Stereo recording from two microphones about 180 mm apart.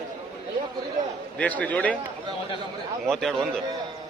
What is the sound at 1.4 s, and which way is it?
Speech, 10° left (ahead or behind).